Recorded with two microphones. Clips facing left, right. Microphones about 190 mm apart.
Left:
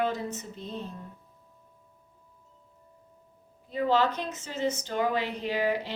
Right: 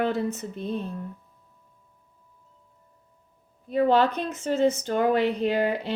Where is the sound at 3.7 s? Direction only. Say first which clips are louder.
Right 5 dB; 55° right (ahead or behind).